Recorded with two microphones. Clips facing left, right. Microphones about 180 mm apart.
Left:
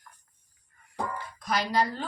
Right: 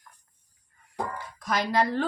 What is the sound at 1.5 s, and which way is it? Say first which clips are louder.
Speech: right 2 dB; 55° right (ahead or behind).